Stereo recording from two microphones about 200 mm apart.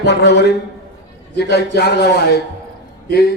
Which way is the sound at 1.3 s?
55° left (ahead or behind).